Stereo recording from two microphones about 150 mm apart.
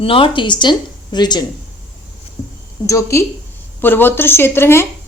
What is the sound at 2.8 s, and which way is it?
A woman's voice, 20° left (ahead or behind).